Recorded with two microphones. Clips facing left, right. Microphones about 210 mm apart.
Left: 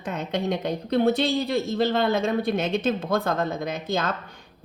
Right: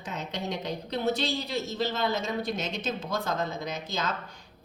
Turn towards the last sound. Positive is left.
turn(degrees=55)  # may be behind; listen again after turning